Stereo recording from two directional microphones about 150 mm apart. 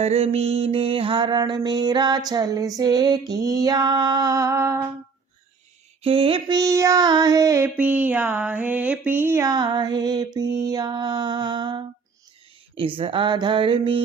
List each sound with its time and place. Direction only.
0.0 s mantra: 45° right (ahead or behind); by 4.9 s 20° right (ahead or behind)
6.0 s mantra: 40° right (ahead or behind)
6.6 s mantra: 20° right (ahead or behind)
7.8 s a sound: 10° right (ahead or behind)
9.0 s mantra: 15° right (ahead or behind); by 11.8 s 30° right (ahead or behind)
13.0 s mantra: 35° right (ahead or behind)